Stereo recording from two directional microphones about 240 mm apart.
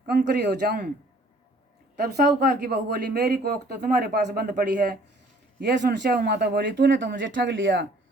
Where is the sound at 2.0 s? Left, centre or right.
Right.